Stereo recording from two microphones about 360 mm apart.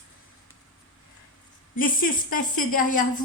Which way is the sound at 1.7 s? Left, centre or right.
Left.